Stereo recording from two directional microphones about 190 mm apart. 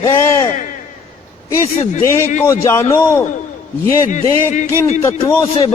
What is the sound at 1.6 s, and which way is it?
A man's voice, 15° left (ahead or behind).